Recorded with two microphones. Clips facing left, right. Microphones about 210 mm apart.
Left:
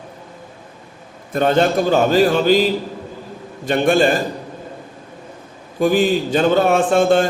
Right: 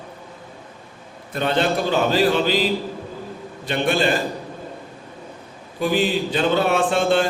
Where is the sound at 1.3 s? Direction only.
45° left (ahead or behind).